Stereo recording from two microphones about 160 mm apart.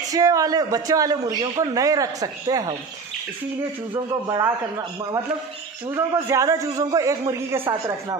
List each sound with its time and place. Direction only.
0.1 s a man's voice: 20° right (ahead or behind)
3.9 s a man's voice: 25° right (ahead or behind)
5.9 s a man's voice: 20° right (ahead or behind)